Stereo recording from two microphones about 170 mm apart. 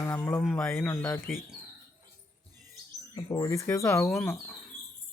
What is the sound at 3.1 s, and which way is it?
Speech, 15° left (ahead or behind).